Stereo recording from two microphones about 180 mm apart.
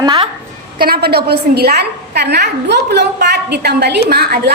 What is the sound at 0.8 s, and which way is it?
A woman's voice, 60° right (ahead or behind).